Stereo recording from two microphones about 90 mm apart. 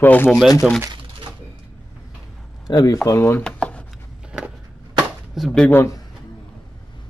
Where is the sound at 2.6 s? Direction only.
45° left (ahead or behind); by 3.4 s 25° left (ahead or behind).